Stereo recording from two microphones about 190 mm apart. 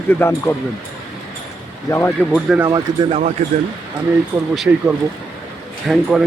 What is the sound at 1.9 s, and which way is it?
Speech, 15° left (ahead or behind).